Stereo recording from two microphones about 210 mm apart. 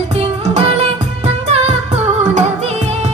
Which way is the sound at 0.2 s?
30° right (ahead or behind).